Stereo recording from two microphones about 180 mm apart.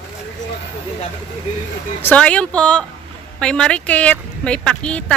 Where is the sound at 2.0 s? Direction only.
5° left (ahead or behind).